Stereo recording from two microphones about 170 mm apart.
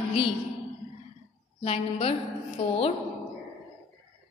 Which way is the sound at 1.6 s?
35° left (ahead or behind).